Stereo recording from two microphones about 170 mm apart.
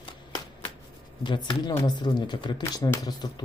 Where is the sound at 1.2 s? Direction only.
25° left (ahead or behind).